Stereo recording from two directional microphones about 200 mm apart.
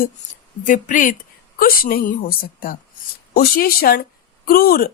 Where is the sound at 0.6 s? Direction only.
40° left (ahead or behind).